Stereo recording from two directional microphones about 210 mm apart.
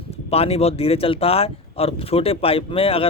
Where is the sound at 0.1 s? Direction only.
30° left (ahead or behind).